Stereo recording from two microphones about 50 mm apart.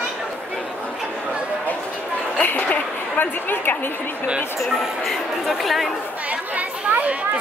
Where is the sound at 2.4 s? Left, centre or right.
Left.